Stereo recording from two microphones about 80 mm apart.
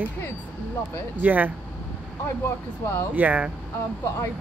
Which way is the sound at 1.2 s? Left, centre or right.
Centre.